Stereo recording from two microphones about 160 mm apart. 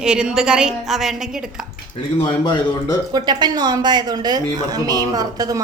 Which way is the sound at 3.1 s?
25° right (ahead or behind).